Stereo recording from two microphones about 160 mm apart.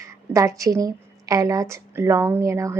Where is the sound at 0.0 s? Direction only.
20° right (ahead or behind).